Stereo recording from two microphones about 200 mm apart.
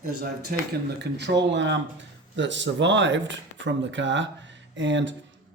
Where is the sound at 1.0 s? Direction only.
60° right (ahead or behind).